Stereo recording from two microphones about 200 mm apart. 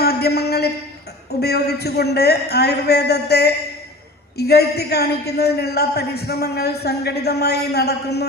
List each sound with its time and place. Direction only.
0.0 s a man's voice: 50° left (ahead or behind)